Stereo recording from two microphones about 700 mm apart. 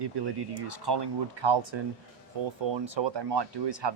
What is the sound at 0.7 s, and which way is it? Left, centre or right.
Speech, right.